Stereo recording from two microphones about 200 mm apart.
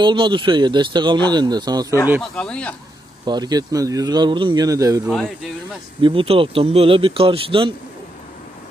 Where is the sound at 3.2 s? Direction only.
20° right (ahead or behind).